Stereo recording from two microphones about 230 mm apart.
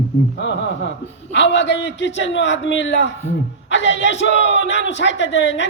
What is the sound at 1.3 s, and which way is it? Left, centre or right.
Speech, left.